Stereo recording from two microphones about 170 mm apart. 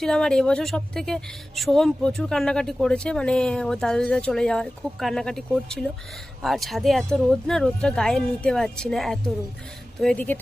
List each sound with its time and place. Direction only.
0.0 s a woman's voice: 5° left (ahead or behind)